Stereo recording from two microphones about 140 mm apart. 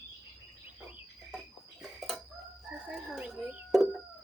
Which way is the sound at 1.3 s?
Centre (ahead or behind).